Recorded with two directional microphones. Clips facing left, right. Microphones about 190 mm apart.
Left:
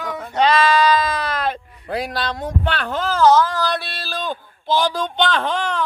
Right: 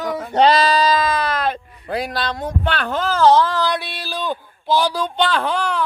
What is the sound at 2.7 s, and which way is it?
Speech, 50° right (ahead or behind).